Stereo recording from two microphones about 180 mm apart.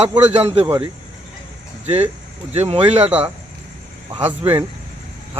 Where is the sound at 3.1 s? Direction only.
10° right (ahead or behind).